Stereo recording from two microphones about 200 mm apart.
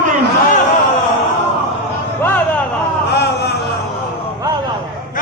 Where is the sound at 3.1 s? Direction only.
55° left (ahead or behind).